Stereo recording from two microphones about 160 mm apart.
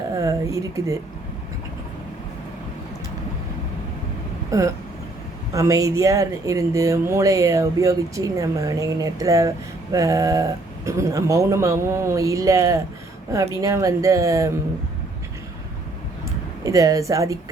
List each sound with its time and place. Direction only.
0.1 s a sound: 20° right (ahead or behind)
4.5 s speech: 20° right (ahead or behind)
16.6 s speech: 20° right (ahead or behind)